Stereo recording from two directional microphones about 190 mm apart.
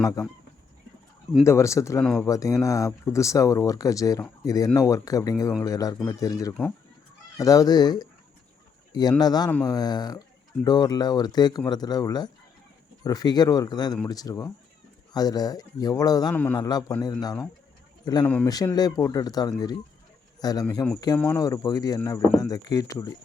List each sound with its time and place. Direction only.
0.0 s speech: 20° left (ahead or behind)
1.5 s speech: 15° left (ahead or behind)
9.5 s speech: 10° left (ahead or behind)
9.7 s speech: 20° left (ahead or behind)
16.3 s speech: 10° left (ahead or behind)
16.6 s speech: 20° left (ahead or behind)